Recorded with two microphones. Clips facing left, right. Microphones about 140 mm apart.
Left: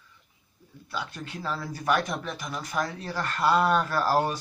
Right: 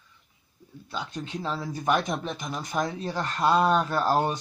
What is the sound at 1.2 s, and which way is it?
Speech, 20° right (ahead or behind).